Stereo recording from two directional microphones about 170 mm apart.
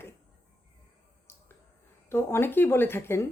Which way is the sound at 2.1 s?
15° left (ahead or behind).